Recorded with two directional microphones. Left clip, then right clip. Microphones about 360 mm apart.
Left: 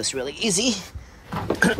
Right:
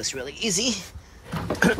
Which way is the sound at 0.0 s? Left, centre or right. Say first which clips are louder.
Left 3 dB; centre.